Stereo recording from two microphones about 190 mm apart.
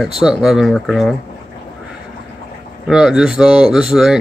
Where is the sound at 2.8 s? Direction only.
5° right (ahead or behind).